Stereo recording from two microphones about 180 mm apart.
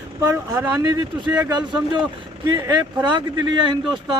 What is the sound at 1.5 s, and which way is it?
Speech, 25° right (ahead or behind).